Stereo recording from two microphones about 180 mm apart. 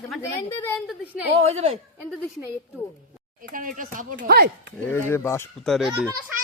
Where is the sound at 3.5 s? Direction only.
50° right (ahead or behind).